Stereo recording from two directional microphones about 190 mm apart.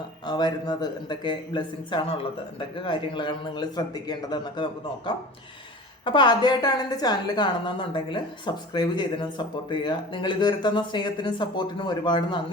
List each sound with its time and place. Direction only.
0.3 s a woman's voice: 20° left (ahead or behind)